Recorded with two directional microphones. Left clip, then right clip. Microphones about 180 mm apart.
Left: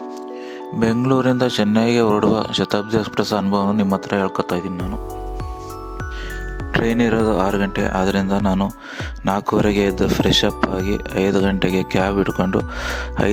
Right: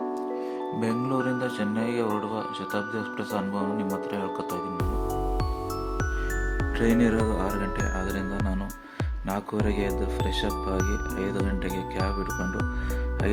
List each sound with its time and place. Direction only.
0.8 s speech: 55° left (ahead or behind)
4.1 s speech: 50° left (ahead or behind)
6.7 s speech: 55° left (ahead or behind)